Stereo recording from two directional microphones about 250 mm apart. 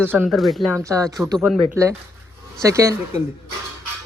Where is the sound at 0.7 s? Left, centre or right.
Centre.